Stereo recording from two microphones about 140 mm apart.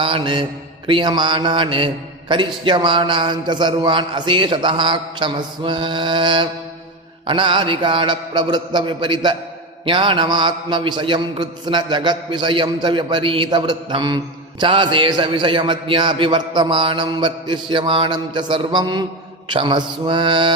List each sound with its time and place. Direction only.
0.0 s a man's voice: 40° right (ahead or behind)